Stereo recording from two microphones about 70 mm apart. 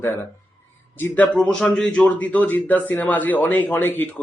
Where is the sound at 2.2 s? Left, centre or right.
Left.